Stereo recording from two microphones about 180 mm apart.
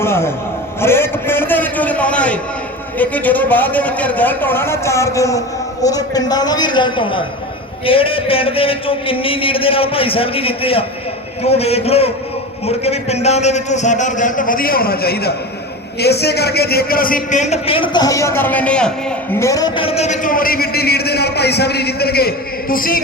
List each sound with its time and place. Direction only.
0.0 s a sound: 15° left (ahead or behind)
0.8 s a man's voice: 15° left (ahead or behind)
19.4 s a man's voice: 20° left (ahead or behind); by 23.0 s 50° left (ahead or behind)